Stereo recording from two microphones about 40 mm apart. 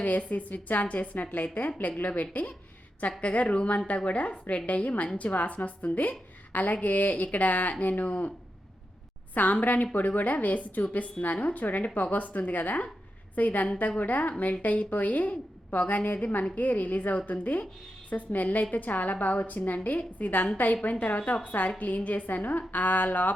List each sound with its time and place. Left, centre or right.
0.0 s a woman's voice: left
9.3 s a woman's voice: left